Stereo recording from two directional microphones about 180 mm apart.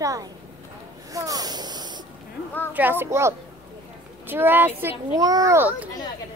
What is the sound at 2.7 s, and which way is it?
Speech, 10° right (ahead or behind).